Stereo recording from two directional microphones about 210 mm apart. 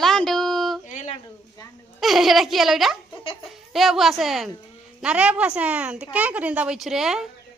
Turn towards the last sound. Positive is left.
turn(degrees=0)  # may be behind; listen again after turning